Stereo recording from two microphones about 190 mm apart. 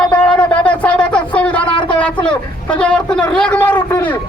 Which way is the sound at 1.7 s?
25° left (ahead or behind).